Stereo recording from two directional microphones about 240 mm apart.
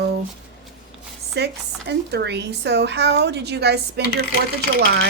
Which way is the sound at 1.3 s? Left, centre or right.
Right.